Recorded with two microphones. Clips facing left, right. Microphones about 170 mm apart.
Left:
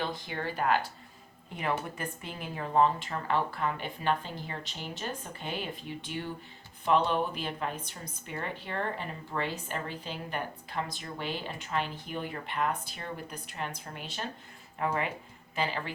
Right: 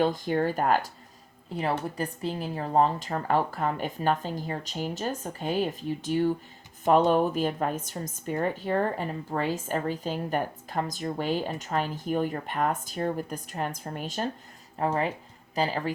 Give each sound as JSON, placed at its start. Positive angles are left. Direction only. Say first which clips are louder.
{"t": 0.0, "sound": "a woman's voice", "louder": "right 10 dB", "side_deg": -45}
{"t": 1.5, "sound": "a woman's voice", "louder": "right 4 dB", "side_deg": -35}